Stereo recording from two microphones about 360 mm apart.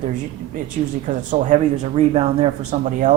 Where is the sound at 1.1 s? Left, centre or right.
Right.